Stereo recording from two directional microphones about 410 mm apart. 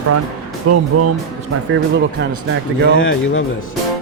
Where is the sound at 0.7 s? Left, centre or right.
Right.